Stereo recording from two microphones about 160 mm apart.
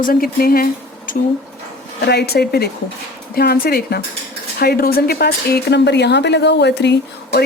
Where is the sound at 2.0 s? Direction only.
85° left.